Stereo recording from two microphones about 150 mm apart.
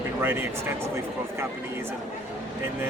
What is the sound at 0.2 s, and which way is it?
Speech, 15° right (ahead or behind).